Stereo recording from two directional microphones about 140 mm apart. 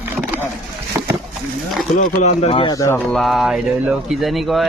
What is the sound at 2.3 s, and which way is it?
Speech, 50° left (ahead or behind).